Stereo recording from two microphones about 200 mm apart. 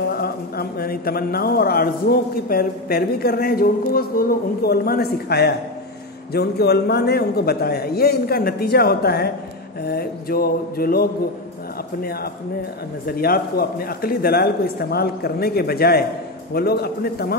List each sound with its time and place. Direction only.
0.1 s speech: 50° left (ahead or behind)